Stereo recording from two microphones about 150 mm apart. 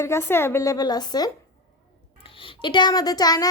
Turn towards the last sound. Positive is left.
turn(degrees=25)  # may be behind; listen again after turning